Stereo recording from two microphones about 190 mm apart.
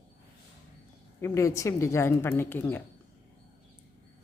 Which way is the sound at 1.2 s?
15° left (ahead or behind).